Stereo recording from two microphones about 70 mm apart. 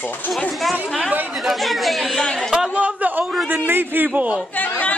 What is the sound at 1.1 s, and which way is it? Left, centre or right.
Speech, right.